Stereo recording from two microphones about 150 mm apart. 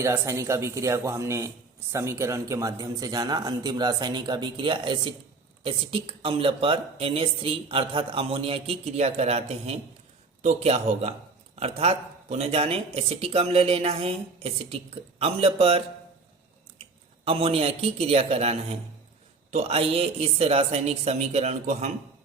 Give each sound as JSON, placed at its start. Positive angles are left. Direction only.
{"t": 0.0, "sound": "a man's voice", "side_deg": -20}
{"t": 17.2, "sound": "a woman's voice", "side_deg": -40}